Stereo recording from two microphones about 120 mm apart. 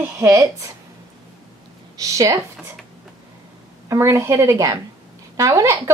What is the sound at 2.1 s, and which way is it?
Speech, 25° right (ahead or behind).